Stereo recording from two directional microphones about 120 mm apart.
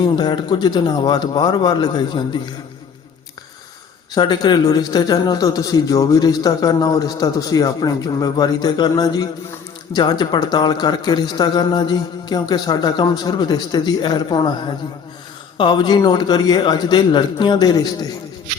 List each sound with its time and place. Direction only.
0.0 s a man's voice: 40° left (ahead or behind)
4.1 s a man's voice: 35° left (ahead or behind)